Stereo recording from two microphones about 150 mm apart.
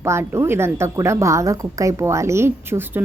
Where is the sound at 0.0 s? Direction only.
20° right (ahead or behind).